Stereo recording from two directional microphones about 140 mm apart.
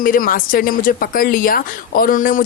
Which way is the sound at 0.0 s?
85° left.